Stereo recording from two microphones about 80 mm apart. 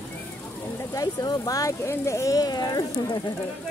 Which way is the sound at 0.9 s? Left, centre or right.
Left.